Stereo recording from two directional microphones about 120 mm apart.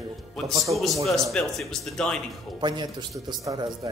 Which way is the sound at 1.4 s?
10° left (ahead or behind).